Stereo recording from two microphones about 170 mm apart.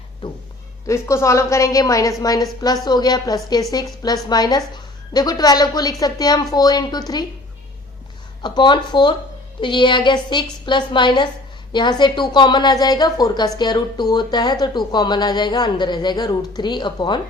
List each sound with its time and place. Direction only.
0.2 s a woman's voice: 30° left (ahead or behind)
0.9 s a woman's voice: 15° left (ahead or behind)
8.4 s a woman's voice: 25° left (ahead or behind)